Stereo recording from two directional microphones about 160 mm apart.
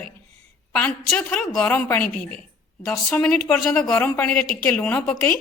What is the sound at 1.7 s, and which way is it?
A woman's voice, 15° left (ahead or behind).